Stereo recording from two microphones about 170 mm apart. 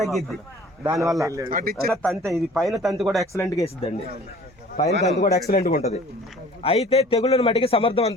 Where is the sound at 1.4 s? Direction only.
55° right (ahead or behind).